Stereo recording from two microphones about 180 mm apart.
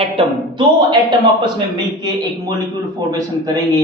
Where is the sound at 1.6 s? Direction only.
20° right (ahead or behind).